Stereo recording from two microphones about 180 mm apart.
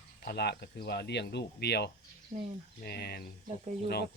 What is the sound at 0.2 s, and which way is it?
Speech, 60° left (ahead or behind).